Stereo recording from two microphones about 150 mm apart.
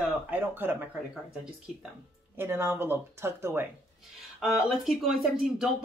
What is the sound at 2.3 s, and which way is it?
Speech, 15° right (ahead or behind).